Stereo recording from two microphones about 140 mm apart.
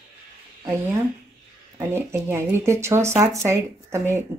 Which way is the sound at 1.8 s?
20° right (ahead or behind).